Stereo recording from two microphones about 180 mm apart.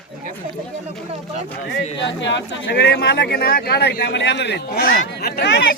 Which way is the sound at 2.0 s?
85° left.